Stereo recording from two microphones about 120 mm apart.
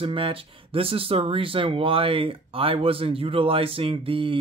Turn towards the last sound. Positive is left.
turn(degrees=-45)  # may be behind; listen again after turning